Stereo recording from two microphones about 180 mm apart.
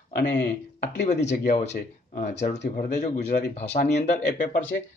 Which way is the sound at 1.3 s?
45° left (ahead or behind).